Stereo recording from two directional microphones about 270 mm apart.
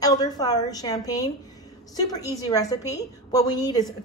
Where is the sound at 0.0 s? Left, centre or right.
Centre.